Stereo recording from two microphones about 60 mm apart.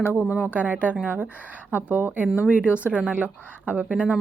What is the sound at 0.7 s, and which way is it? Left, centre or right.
Speech, right.